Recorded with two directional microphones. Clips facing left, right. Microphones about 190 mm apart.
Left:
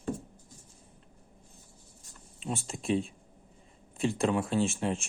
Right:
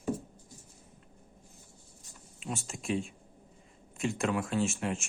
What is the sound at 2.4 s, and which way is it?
Speech, 30° left (ahead or behind).